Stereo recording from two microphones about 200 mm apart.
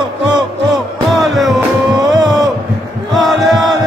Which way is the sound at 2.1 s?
20° right (ahead or behind).